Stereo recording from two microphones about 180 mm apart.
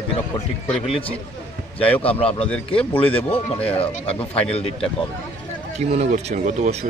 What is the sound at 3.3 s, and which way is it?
Speech, 5° left (ahead or behind).